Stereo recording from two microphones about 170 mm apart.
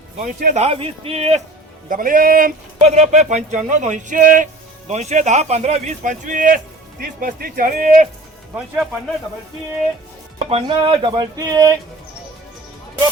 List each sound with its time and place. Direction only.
0.5 s speech: 35° right (ahead or behind)
1.9 s speech: 55° right (ahead or behind)
2.7 s speech: 40° right (ahead or behind)
8.5 s speech: 10° right (ahead or behind)
10.3 s music: 30° right (ahead or behind)